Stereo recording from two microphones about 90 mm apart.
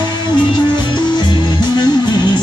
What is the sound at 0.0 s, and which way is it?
Music, 55° left (ahead or behind).